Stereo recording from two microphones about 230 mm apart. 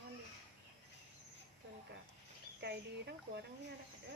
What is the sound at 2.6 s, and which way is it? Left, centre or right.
Speech, right.